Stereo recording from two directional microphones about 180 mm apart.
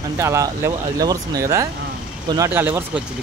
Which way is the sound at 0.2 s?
15° right (ahead or behind).